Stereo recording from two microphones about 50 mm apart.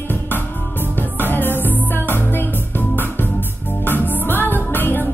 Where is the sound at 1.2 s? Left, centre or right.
Left.